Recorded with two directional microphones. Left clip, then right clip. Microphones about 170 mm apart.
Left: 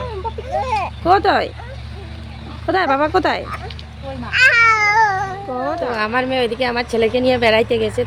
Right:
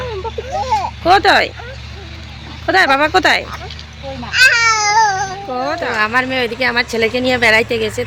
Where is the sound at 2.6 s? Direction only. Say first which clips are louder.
Right 4 dB; 5° left (ahead or behind).